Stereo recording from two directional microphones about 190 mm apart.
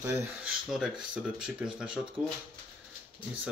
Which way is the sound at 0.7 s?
5° right (ahead or behind).